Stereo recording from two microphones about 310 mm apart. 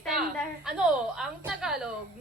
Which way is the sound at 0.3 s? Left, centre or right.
Centre.